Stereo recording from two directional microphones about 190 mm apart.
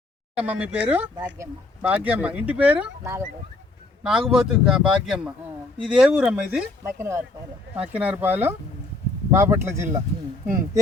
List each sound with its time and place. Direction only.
0.3 s speech: 5° right (ahead or behind)
1.1 s speech: 20° right (ahead or behind)
1.8 s speech: 10° right (ahead or behind)